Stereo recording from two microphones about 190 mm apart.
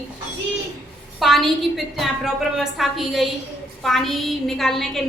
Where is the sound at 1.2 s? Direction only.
Centre (ahead or behind).